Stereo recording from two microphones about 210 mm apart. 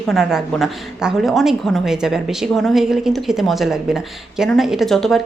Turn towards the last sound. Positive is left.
turn(degrees=0)  # may be behind; listen again after turning